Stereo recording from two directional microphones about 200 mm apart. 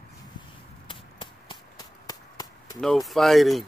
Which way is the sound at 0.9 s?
25° left (ahead or behind).